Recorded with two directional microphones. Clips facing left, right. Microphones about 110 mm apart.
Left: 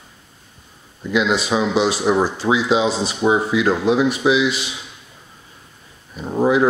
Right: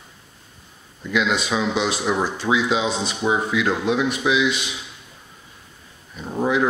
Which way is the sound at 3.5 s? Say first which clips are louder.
Left 4 dB; 30° left (ahead or behind).